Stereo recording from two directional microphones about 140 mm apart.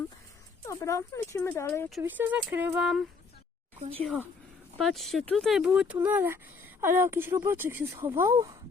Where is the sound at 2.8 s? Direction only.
Centre (ahead or behind).